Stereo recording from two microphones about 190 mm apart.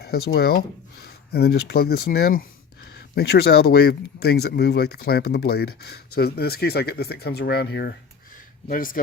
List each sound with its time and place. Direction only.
0.0 s a sound: 55° left (ahead or behind)
0.3 s speech: 55° left (ahead or behind)
8.6 s speech: 45° left (ahead or behind)